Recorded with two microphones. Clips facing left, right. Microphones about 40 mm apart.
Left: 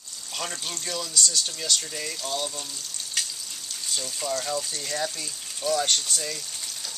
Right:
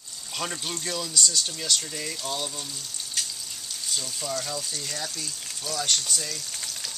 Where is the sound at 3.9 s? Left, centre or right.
Centre.